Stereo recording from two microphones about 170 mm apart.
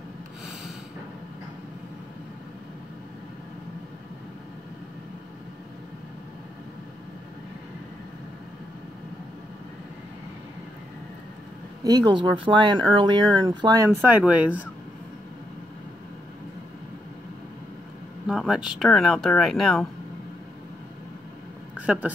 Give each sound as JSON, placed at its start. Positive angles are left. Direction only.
{"t": 11.8, "sound": "speech", "side_deg": -25}
{"t": 18.2, "sound": "speech", "side_deg": 0}
{"t": 21.7, "sound": "speech", "side_deg": -5}